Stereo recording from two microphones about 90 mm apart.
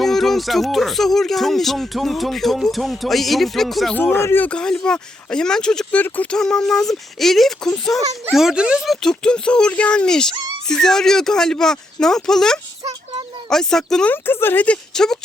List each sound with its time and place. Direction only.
0.0 s speech: 5° left (ahead or behind)
4.1 s speech: 25° left (ahead or behind)
4.4 s speech: 10° left (ahead or behind)
6.0 s speech: 20° left (ahead or behind)
6.3 s speech: 5° left (ahead or behind)
14.1 s speech: 25° left (ahead or behind)
14.9 s speech: 5° left (ahead or behind)